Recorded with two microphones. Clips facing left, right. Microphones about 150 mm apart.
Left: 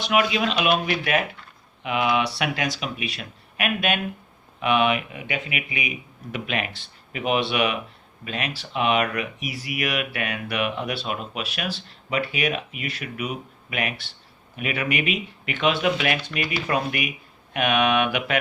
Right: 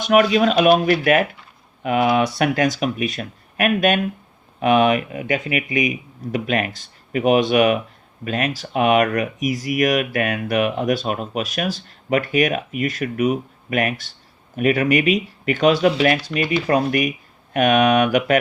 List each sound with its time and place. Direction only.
0.0 s speech: 45° right (ahead or behind)